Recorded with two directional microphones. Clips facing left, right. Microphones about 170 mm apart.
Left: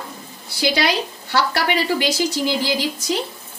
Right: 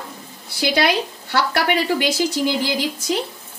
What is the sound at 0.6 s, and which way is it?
Speech, 55° right (ahead or behind).